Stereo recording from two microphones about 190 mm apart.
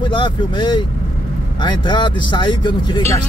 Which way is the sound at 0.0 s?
25° left (ahead or behind).